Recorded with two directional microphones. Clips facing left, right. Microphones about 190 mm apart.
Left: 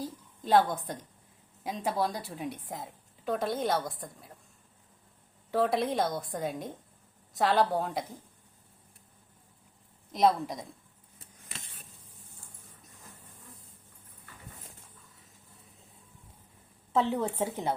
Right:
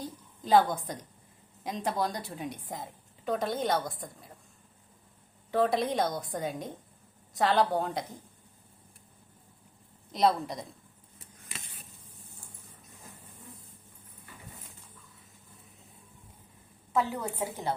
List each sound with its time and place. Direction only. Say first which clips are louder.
0.0 s a sound: left 2 dB; centre (ahead or behind)
1.6 s a woman's voice: left 1 dB; 5° left (ahead or behind)
5.5 s a woman's voice: right 1 dB; centre (ahead or behind)
10.1 s a woman's voice: left 1 dB; centre (ahead or behind)
16.9 s a woman's voice: left 2 dB; 25° left (ahead or behind)